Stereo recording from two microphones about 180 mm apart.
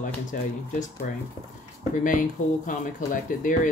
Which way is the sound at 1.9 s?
50° left (ahead or behind).